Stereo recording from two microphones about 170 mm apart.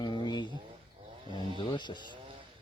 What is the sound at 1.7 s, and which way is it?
Speech, 25° left (ahead or behind).